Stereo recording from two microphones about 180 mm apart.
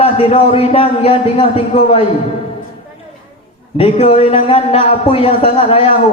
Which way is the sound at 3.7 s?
30° left (ahead or behind).